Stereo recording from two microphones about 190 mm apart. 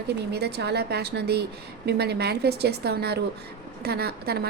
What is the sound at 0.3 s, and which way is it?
A woman's voice, 60° right (ahead or behind).